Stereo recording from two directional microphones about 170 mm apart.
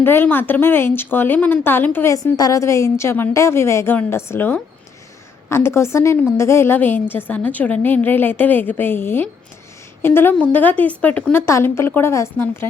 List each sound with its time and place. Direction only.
0.0 s a woman's voice: 10° left (ahead or behind)